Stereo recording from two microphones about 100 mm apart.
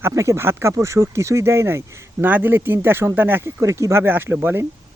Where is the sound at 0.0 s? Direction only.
30° right (ahead or behind).